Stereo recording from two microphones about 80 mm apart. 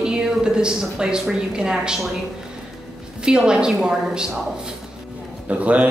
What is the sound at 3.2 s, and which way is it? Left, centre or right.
A woman's voice, centre.